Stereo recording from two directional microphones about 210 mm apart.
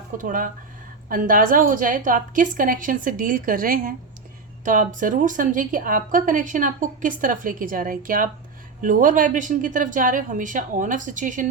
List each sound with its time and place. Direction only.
0.2 s a woman's voice: 40° right (ahead or behind)